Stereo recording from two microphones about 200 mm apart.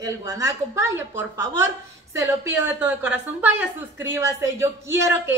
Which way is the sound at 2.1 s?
10° right (ahead or behind).